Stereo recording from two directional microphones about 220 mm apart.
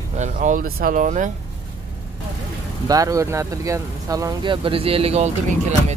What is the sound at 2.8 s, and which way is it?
Speech, 15° right (ahead or behind).